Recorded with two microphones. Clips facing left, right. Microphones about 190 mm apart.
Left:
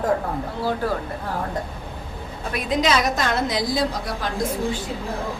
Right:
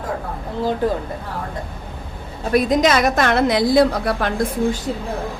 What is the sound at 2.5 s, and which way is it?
A woman's voice, 40° right (ahead or behind).